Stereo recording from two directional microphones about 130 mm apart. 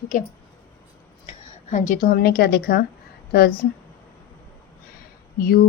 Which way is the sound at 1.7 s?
90° left.